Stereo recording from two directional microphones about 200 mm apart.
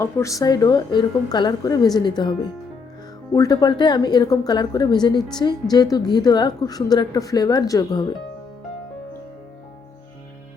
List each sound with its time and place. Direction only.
0.0 s a woman's voice: 15° left (ahead or behind)